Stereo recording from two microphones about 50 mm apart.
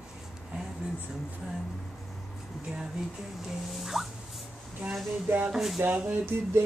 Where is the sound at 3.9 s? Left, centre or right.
Centre.